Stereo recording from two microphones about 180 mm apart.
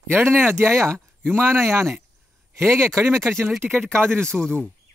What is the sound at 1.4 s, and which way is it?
Speech, 15° right (ahead or behind).